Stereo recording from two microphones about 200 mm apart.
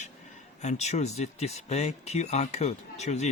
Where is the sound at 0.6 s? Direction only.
35° left (ahead or behind).